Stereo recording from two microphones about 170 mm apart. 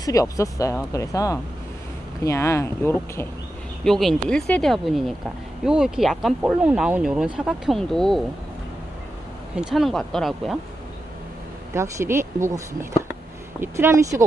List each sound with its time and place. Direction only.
0.0 s speech: 20° left (ahead or behind)
3.8 s speech: centre (ahead or behind)
9.6 s speech: centre (ahead or behind)
11.7 s speech: 15° right (ahead or behind)